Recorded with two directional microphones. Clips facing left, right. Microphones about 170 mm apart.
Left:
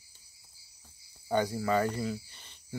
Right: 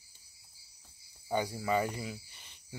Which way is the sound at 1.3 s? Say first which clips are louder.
Left 3 dB; 10° right (ahead or behind).